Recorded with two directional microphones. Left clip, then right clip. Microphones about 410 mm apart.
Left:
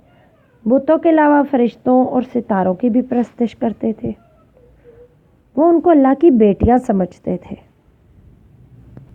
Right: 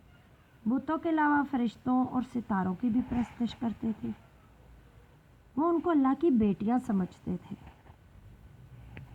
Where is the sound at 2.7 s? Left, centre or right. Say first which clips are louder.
Left 16 dB; left.